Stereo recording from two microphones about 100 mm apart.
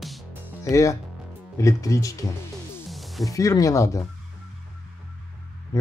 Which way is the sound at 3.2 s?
35° left (ahead or behind).